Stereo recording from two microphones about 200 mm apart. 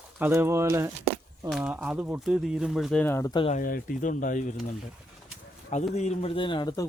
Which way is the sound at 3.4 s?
40° left (ahead or behind).